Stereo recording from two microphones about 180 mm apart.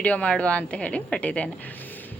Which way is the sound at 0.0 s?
5° left (ahead or behind).